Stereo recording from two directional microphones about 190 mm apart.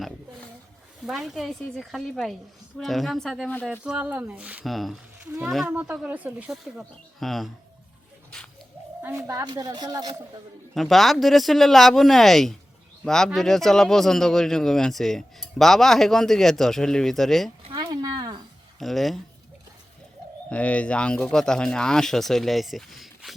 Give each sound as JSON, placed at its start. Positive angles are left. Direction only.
{"t": 1.0, "sound": "speech", "side_deg": 0}
{"t": 3.7, "sound": "speech", "side_deg": -5}
{"t": 9.2, "sound": "a woman's voice", "side_deg": -20}
{"t": 10.8, "sound": "speech", "side_deg": 0}
{"t": 17.6, "sound": "a sound", "side_deg": -25}
{"t": 18.8, "sound": "speech", "side_deg": 0}
{"t": 20.5, "sound": "speech", "side_deg": 5}